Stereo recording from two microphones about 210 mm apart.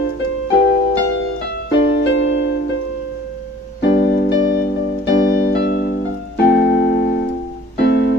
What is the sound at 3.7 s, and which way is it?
Keyboard, 50° left (ahead or behind).